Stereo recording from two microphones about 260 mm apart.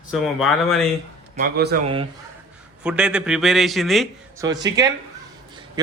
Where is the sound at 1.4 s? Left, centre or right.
Right.